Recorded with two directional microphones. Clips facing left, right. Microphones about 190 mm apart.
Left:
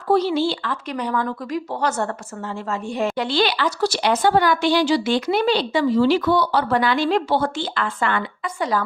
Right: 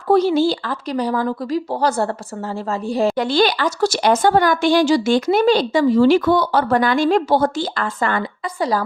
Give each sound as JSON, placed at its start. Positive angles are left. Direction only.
{"t": 0.1, "sound": "speech", "side_deg": -45}